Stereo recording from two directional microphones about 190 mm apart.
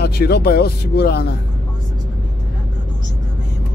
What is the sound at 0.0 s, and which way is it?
Speech, 55° left (ahead or behind).